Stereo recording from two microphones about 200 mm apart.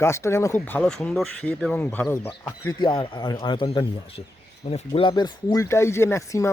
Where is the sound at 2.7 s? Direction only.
20° left (ahead or behind).